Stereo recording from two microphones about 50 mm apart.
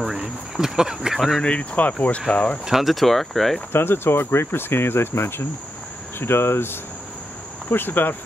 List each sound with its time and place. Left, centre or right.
0.0 s speech: centre
1.4 s speech: left
2.6 s speech: centre
3.7 s speech: left